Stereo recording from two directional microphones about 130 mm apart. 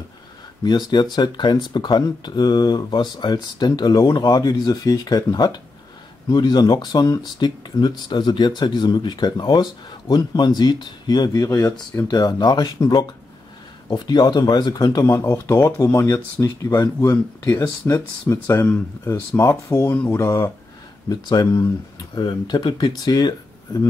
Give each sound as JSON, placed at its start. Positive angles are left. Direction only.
{"t": 0.7, "sound": "speech", "side_deg": 35}